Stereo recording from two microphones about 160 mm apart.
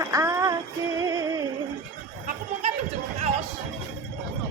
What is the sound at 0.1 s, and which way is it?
Female singing, 20° right (ahead or behind).